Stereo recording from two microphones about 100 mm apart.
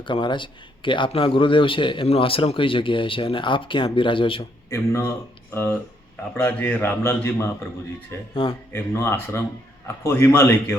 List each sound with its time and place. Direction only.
0.0 s a man's voice: 55° left (ahead or behind)
4.7 s speech: 25° left (ahead or behind)
8.4 s a man's voice: 60° left (ahead or behind)
8.7 s speech: 25° left (ahead or behind)